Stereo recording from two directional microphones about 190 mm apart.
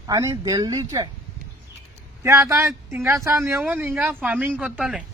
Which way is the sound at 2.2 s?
15° right (ahead or behind).